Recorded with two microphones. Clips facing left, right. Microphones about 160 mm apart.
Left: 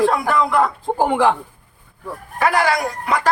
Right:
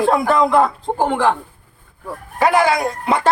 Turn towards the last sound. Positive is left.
turn(degrees=-25)  # may be behind; listen again after turning